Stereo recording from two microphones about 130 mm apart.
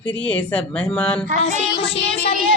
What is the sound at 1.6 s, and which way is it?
Child singing, 45° left (ahead or behind).